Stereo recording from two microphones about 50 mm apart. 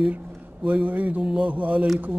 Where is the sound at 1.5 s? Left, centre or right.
Right.